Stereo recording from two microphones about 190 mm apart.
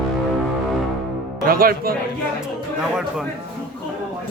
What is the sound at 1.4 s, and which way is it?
Speech, 50° right (ahead or behind).